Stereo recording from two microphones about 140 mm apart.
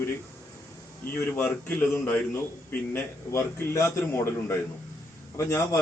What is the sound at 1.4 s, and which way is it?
A man's voice, 10° left (ahead or behind).